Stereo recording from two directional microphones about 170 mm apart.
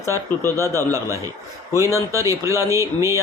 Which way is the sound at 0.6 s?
20° right (ahead or behind).